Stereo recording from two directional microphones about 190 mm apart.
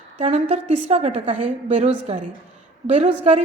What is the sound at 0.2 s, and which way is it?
A woman's voice, 35° right (ahead or behind).